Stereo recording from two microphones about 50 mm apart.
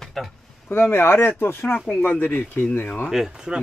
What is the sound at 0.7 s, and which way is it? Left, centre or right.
Speech, left.